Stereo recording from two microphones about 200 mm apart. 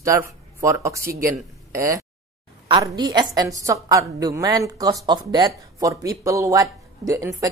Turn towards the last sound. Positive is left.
turn(degrees=-15)  # may be behind; listen again after turning